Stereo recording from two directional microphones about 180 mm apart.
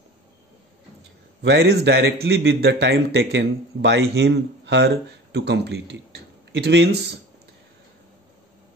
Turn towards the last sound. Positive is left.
turn(degrees=-70)  # may be behind; listen again after turning